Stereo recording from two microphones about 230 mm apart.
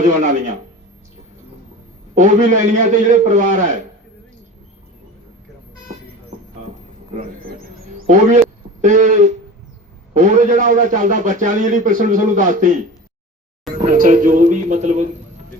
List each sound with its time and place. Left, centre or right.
0.0 s a man's voice: right
2.1 s a man's voice: right
8.0 s a man's voice: right
13.9 s a man's voice: right